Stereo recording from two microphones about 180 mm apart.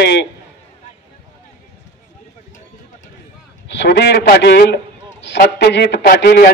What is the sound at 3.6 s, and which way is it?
A man's voice, 70° left (ahead or behind).